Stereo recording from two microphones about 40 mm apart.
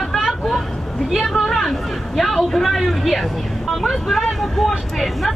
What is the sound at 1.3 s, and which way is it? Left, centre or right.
Speech, centre.